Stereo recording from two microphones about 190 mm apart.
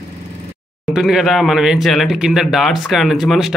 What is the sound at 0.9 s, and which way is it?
Speech, centre (ahead or behind).